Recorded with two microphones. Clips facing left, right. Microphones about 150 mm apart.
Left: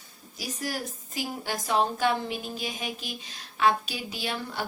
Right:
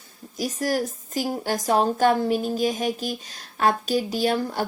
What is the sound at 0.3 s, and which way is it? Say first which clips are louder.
A woman's voice: right 9 dB; 45° right (ahead or behind).